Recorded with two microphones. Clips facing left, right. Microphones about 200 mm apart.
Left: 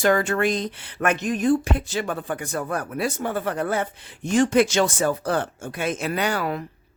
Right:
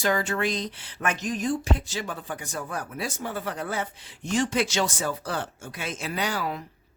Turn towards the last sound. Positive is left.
turn(degrees=60)  # may be behind; listen again after turning